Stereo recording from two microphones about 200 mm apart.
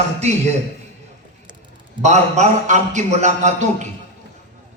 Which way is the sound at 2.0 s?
35° right (ahead or behind).